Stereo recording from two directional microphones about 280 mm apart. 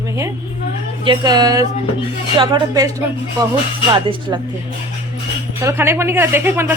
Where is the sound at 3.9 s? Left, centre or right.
Centre.